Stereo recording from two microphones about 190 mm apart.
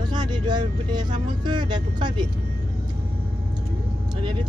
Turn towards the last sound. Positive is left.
turn(degrees=-25)  # may be behind; listen again after turning